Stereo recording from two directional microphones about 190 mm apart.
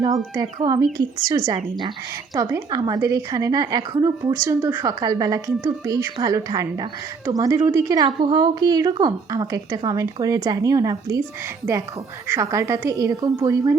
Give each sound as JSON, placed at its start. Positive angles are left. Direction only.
{"t": 0.0, "sound": "a woman's voice", "side_deg": -20}
{"t": 2.3, "sound": "a woman's voice", "side_deg": -20}
{"t": 12.3, "sound": "a woman's voice", "side_deg": -15}